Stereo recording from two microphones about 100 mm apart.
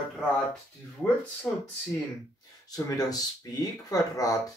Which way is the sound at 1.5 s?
10° left (ahead or behind).